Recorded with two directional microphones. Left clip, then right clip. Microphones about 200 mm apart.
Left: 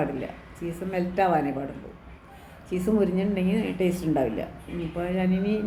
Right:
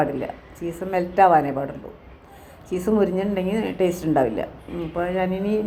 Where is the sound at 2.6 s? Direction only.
10° right (ahead or behind).